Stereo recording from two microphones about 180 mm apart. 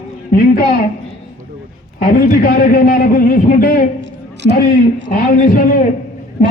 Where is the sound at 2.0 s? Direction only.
50° left (ahead or behind).